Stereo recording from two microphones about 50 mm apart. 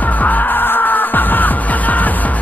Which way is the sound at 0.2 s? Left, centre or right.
Left.